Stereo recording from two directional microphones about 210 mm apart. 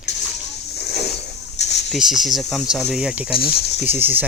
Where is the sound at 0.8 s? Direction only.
50° left (ahead or behind).